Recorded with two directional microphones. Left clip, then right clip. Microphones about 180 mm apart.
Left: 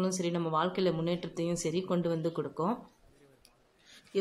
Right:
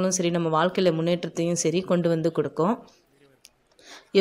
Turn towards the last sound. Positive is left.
turn(degrees=-40)  # may be behind; listen again after turning